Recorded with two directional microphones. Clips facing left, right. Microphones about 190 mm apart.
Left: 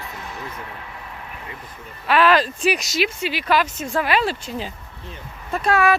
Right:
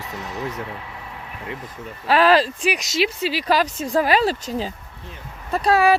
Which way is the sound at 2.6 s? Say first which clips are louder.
Even; 15° right (ahead or behind).